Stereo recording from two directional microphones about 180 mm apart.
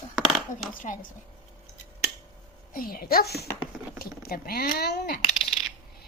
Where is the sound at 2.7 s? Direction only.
55° left (ahead or behind).